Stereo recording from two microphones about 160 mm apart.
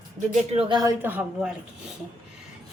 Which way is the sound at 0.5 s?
25° right (ahead or behind).